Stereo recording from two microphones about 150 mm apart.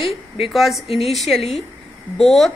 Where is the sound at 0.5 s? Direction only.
Centre (ahead or behind).